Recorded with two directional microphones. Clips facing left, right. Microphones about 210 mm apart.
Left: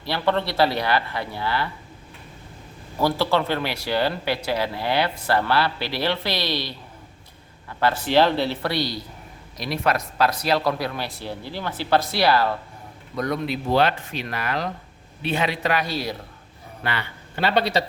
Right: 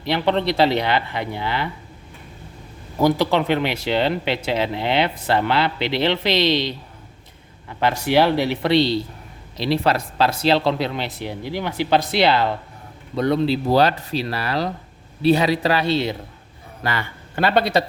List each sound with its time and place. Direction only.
0.0 s speech: 20° right (ahead or behind)
3.0 s speech: 20° right (ahead or behind)
16.8 s a man's voice: 45° right (ahead or behind)